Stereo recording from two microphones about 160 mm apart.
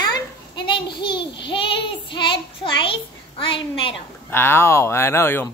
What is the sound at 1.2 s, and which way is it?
Child singing, 30° left (ahead or behind).